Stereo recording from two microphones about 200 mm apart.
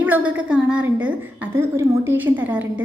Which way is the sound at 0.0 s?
10° right (ahead or behind).